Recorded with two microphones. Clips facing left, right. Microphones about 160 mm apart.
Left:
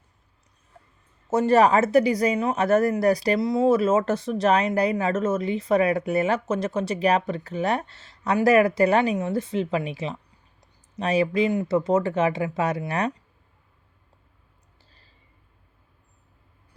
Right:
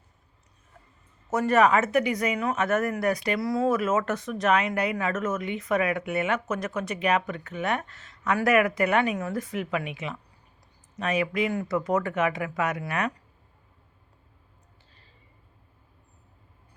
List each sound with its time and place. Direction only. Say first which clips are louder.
1.3 s speech: left 3 dB; 30° left (ahead or behind)
3.4 s speech: left 4 dB; 25° left (ahead or behind)